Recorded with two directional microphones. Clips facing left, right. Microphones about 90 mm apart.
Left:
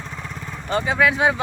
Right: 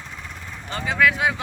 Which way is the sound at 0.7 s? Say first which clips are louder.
Left 2 dB; 25° left (ahead or behind).